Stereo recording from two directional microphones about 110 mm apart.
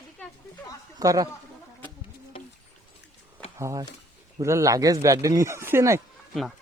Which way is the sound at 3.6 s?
25° right (ahead or behind).